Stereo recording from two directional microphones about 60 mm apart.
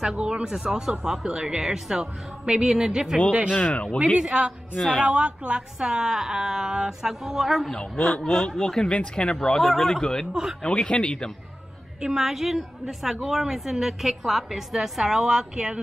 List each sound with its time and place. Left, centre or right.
0.0 s a woman's voice: centre
3.7 s speech: centre
4.2 s a woman's voice: centre
9.6 s speech: centre
12.0 s a woman's voice: centre